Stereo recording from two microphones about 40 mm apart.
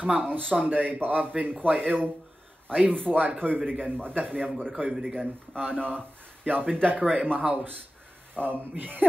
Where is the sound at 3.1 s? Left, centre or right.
Right.